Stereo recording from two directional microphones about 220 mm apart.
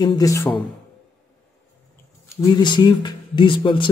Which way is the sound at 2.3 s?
15° left (ahead or behind).